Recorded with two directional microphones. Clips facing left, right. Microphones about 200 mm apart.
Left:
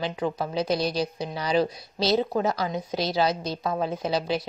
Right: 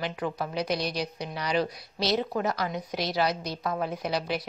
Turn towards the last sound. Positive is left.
turn(degrees=25)  # may be behind; listen again after turning